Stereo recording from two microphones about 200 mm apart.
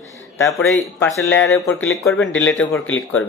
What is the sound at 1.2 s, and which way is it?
Speech, 10° left (ahead or behind).